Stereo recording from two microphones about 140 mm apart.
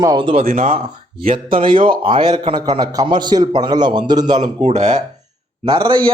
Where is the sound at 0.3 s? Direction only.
65° right (ahead or behind).